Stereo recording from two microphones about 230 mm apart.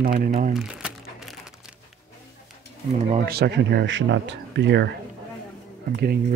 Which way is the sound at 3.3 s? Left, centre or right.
Right.